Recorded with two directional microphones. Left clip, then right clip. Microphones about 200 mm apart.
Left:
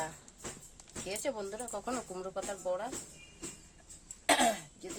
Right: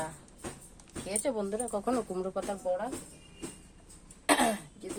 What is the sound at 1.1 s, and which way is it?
Speech, 20° right (ahead or behind).